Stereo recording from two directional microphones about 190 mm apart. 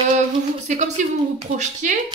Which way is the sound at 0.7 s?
40° right (ahead or behind).